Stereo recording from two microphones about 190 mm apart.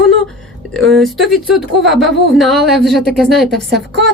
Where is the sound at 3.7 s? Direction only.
65° right (ahead or behind).